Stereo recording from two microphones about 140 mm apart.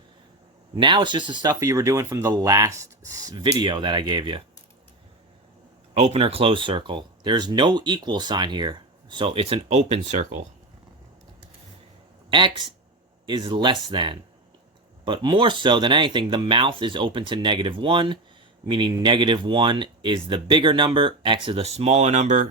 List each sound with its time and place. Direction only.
0.8 s speech: 35° right (ahead or behind)
5.9 s speech: 50° right (ahead or behind)
12.3 s speech: 35° right (ahead or behind); by 22.4 s 60° right (ahead or behind)